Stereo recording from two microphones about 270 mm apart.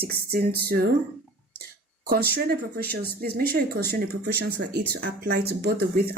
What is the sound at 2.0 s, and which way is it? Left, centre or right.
Speech, right.